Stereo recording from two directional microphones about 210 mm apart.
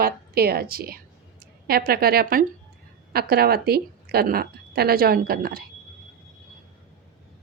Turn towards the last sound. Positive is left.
turn(degrees=-45)  # may be behind; listen again after turning